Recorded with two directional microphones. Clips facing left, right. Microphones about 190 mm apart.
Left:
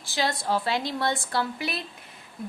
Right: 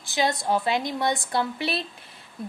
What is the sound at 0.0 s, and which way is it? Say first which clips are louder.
A woman's voice: right 3 dB; 20° right (ahead or behind).